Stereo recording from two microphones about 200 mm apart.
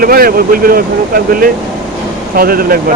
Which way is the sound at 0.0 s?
45° right (ahead or behind).